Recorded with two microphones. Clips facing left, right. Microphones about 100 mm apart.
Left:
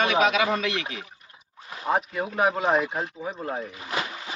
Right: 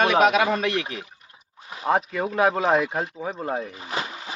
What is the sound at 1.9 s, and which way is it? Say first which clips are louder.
Speech: right 3 dB; 85° right.